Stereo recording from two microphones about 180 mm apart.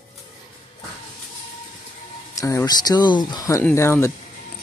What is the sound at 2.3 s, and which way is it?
Speech, 20° left (ahead or behind).